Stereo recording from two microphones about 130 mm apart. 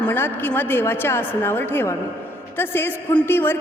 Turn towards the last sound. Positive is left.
turn(degrees=15)  # may be behind; listen again after turning